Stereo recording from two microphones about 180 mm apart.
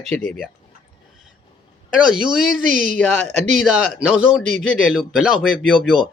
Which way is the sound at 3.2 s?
40° right (ahead or behind).